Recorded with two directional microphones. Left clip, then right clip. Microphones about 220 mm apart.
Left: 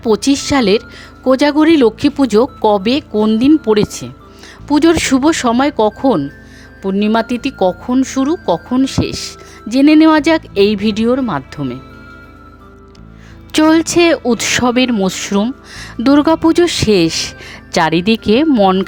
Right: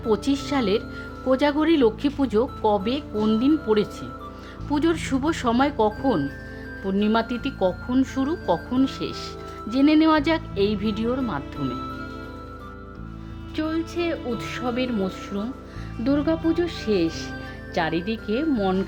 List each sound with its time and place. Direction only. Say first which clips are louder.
0.0 s a woman's voice: left 10 dB; 40° left (ahead or behind)
13.5 s speech: left 17 dB; 45° left (ahead or behind)